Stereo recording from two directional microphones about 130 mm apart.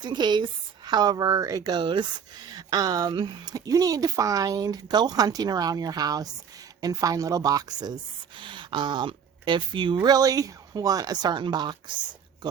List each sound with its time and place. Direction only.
0.0 s speech: 35° right (ahead or behind)